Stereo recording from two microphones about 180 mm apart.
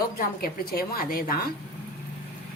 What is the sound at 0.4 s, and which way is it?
Speech, 55° left (ahead or behind).